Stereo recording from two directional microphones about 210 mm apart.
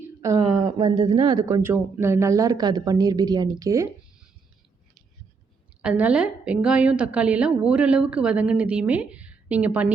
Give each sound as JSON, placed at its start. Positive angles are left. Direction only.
{"t": 0.2, "sound": "a sound", "side_deg": -15}
{"t": 0.6, "sound": "speech", "side_deg": -25}
{"t": 5.8, "sound": "a woman's voice", "side_deg": -5}